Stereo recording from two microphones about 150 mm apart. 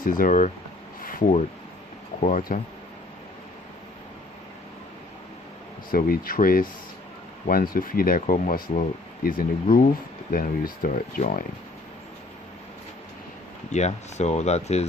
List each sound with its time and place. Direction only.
0.0 s speech: 65° left (ahead or behind)
2.2 s speech: 60° left (ahead or behind)
5.9 s speech: 75° left (ahead or behind)
13.7 s speech: 50° left (ahead or behind)